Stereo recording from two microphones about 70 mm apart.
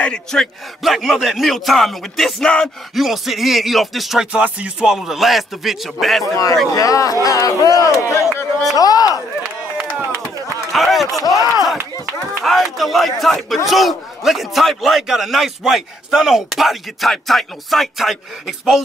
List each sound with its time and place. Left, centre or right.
0.0 s a man's voice: centre
4.3 s music: centre
4.9 s a man's voice: centre
6.3 s speech: left
8.7 s speech: left
10.7 s a sound: centre
11.1 s speech: left
11.5 s a man's voice: centre